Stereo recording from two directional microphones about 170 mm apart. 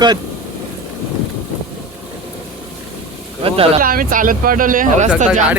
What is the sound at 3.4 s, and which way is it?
Speech, 35° right (ahead or behind).